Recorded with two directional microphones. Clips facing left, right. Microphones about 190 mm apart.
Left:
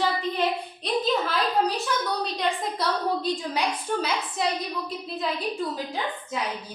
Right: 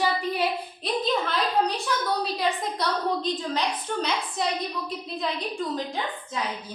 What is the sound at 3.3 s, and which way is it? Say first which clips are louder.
A woman's voice: even; 10° left (ahead or behind).